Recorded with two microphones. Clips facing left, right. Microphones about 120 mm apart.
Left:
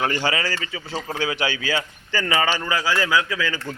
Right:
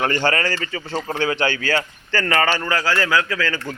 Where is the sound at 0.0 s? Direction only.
10° left (ahead or behind).